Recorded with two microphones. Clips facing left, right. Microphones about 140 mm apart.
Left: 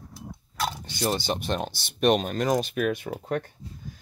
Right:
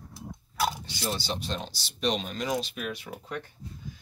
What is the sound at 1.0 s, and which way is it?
Speech, 50° left (ahead or behind).